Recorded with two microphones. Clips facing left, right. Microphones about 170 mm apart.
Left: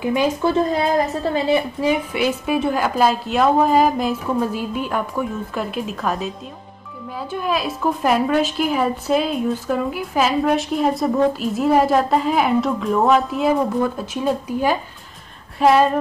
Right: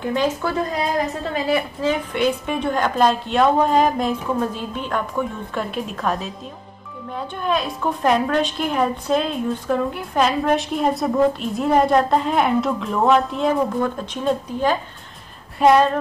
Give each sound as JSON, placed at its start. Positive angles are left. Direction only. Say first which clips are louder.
{"t": 0.0, "sound": "a woman's voice", "louder": "left 2 dB", "side_deg": 10}
{"t": 1.8, "sound": "a woman's voice", "louder": "left 1 dB", "side_deg": 10}